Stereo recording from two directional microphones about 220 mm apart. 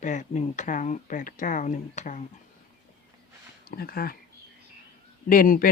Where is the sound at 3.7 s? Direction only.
45° left (ahead or behind).